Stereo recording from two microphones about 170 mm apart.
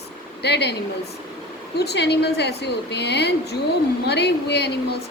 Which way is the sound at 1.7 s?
75° left (ahead or behind).